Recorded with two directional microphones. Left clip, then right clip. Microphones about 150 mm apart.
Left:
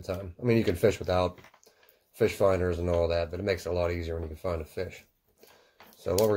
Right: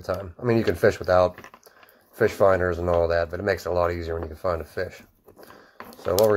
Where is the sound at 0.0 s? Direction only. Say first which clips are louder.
Right 5 dB; 25° left (ahead or behind).